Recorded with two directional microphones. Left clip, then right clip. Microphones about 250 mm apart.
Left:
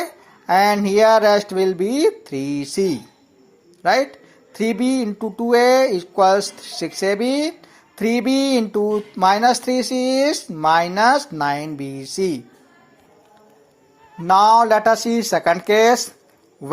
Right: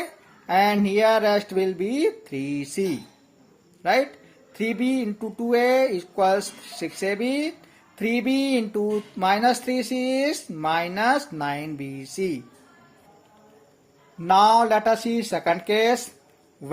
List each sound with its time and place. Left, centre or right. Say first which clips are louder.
0.0 s speech: left 6 dB; left
14.3 s speech: left 4 dB; centre